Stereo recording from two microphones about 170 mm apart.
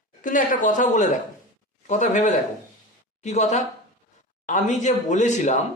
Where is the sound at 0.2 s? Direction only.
50° left (ahead or behind).